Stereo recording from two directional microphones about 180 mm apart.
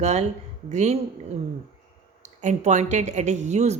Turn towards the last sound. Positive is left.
turn(degrees=-40)  # may be behind; listen again after turning